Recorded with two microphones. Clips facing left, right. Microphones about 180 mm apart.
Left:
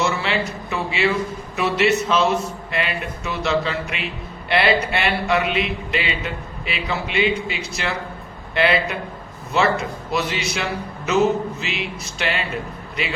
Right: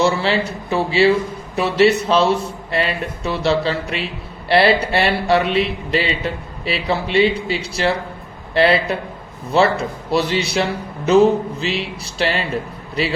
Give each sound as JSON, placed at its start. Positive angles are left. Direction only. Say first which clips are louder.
{"t": 0.0, "sound": "a man's voice", "louder": "right 5 dB", "side_deg": -35}